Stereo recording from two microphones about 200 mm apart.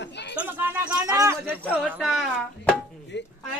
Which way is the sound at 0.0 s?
55° left (ahead or behind).